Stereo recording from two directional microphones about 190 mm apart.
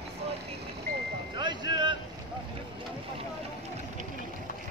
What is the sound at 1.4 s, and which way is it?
Vehicle, 25° right (ahead or behind).